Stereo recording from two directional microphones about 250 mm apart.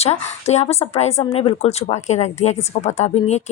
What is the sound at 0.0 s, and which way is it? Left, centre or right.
Speech, left.